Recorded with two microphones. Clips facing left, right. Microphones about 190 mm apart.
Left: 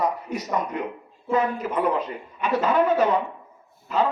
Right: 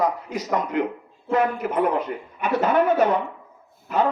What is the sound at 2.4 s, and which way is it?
Speech, 55° right (ahead or behind).